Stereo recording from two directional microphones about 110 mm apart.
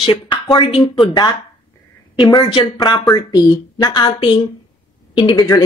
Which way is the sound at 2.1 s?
45° left (ahead or behind).